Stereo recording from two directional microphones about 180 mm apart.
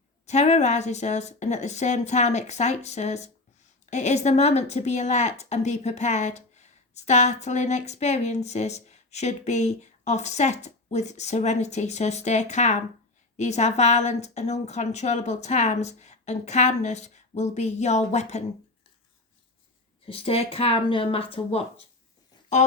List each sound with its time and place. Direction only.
0.3 s a woman's voice: 40° left (ahead or behind)
20.1 s a woman's voice: 30° left (ahead or behind)